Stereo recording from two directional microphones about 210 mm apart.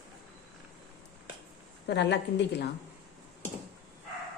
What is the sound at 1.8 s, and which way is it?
Speech, 55° left (ahead or behind).